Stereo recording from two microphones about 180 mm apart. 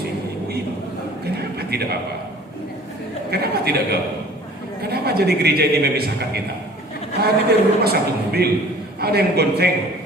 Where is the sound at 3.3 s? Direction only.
60° right (ahead or behind).